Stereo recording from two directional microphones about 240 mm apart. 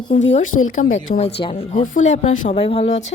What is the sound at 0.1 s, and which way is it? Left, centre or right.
A woman's voice, left.